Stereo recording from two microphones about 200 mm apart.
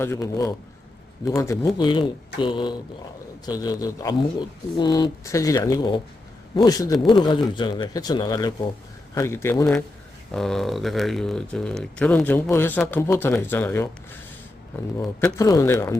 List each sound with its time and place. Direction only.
0.0 s speech: 15° left (ahead or behind)